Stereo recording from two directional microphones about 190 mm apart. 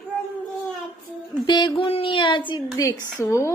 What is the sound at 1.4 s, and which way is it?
A woman's voice, 25° left (ahead or behind).